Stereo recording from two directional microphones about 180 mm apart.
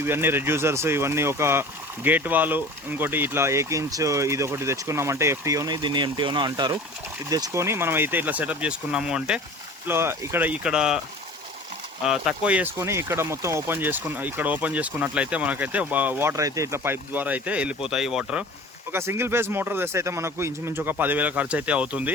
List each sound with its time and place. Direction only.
0.0 s speech: 10° right (ahead or behind)
12.0 s speech: 5° right (ahead or behind)